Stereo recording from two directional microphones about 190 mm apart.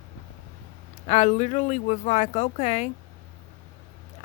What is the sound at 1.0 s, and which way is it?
Speech, 35° left (ahead or behind).